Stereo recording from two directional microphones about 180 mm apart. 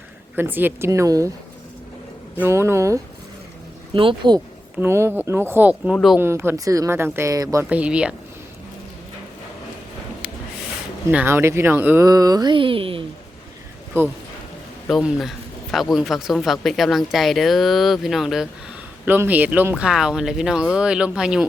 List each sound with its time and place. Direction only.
0.3 s speech: 10° right (ahead or behind)
2.4 s speech: 15° right (ahead or behind)
3.9 s speech: 25° right (ahead or behind)
4.8 s speech: 15° right (ahead or behind)
6.1 s speech: 15° right (ahead or behind)
7.6 s speech: 5° right (ahead or behind)
11.1 s speech: 10° right (ahead or behind); by 13.1 s 30° right (ahead or behind)
14.0 s speech: 15° right (ahead or behind)
14.8 s speech: centre (ahead or behind)